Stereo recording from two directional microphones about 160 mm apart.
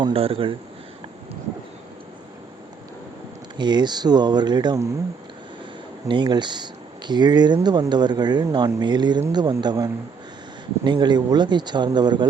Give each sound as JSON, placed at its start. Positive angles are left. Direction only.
{"t": 0.0, "sound": "speech", "side_deg": -35}
{"t": 3.6, "sound": "speech", "side_deg": -25}
{"t": 6.1, "sound": "speech", "side_deg": -30}